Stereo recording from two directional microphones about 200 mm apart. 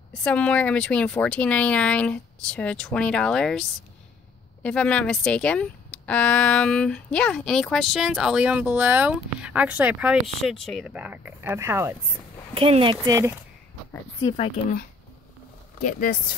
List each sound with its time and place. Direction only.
0.1 s speech: 5° left (ahead or behind)
4.6 s speech: 5° left (ahead or behind); by 11.9 s 15° right (ahead or behind)
12.5 s speech: 25° right (ahead or behind)
13.0 s speech: 15° right (ahead or behind)
14.2 s speech: 30° left (ahead or behind)
15.8 s speech: 40° left (ahead or behind)